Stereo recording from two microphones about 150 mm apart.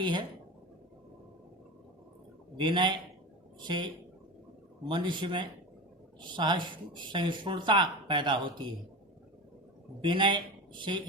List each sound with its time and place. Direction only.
0.0 s speech: 30° right (ahead or behind)
2.6 s speech: 30° right (ahead or behind)
10.0 s speech: 30° right (ahead or behind)